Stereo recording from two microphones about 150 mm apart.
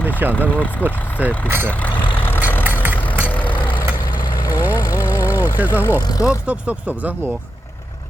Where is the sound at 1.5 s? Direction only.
15° right (ahead or behind).